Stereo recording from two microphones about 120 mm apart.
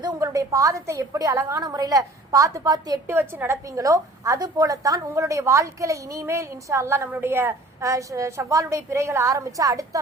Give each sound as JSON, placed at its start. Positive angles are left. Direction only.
{"t": 0.0, "sound": "a woman's voice", "side_deg": -30}
{"t": 3.1, "sound": "a woman's voice", "side_deg": -20}